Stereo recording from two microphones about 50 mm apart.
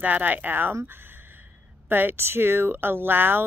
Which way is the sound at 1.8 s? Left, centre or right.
Right.